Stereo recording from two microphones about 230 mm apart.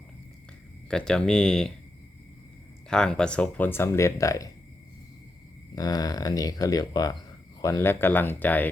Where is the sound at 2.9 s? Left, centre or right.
Centre.